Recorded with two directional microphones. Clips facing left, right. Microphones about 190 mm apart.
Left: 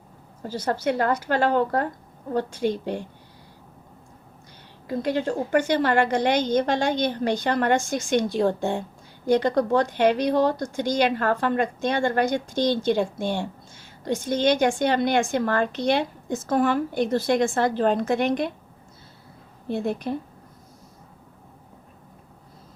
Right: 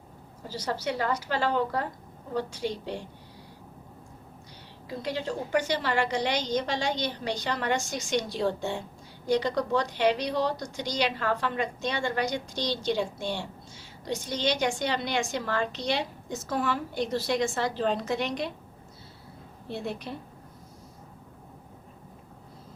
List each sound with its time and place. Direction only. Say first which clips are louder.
0.4 s speech: left 6 dB; 50° left (ahead or behind)
4.9 s speech: left 7 dB; 50° left (ahead or behind)
19.6 s speech: left 8 dB; 50° left (ahead or behind)